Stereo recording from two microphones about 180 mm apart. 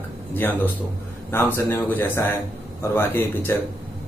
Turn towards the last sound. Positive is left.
turn(degrees=10)  # may be behind; listen again after turning